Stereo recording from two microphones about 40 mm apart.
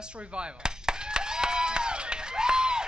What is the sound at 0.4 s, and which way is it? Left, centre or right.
Chop, right.